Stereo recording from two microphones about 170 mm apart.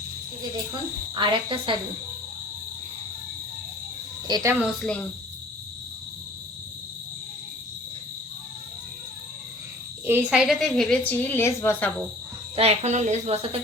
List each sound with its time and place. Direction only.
1.1 s cricket: 25° right (ahead or behind)
4.3 s cricket: 25° right (ahead or behind)
4.6 s speech: 5° left (ahead or behind)
10.1 s a woman's voice: 5° right (ahead or behind); by 11.9 s 15° left (ahead or behind)
12.5 s speech: 35° right (ahead or behind)